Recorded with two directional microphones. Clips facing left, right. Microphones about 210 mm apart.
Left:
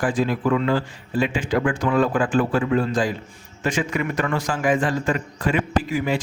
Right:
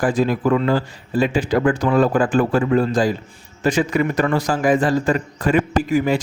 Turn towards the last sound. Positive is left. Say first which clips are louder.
# right 5 dB
turn(degrees=-45)  # may be behind; listen again after turning